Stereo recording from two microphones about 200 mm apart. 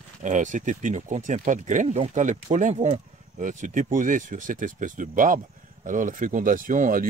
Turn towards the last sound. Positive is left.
turn(degrees=-40)  # may be behind; listen again after turning